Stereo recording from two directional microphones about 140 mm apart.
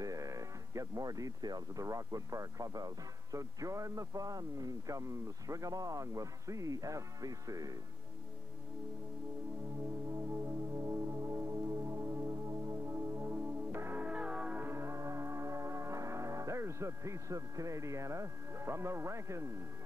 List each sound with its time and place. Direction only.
0.0 s speech: 25° right (ahead or behind)
10.1 s music: 20° right (ahead or behind)